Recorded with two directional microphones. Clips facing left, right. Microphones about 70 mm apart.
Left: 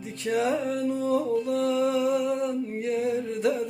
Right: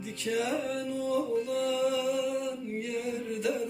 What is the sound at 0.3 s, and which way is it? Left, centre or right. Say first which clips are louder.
Music: left 5 dB; left.